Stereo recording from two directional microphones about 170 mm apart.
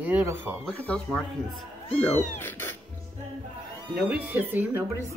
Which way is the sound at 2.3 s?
10° left (ahead or behind).